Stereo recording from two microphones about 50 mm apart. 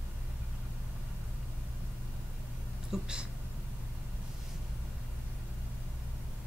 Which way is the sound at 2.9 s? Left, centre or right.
Centre.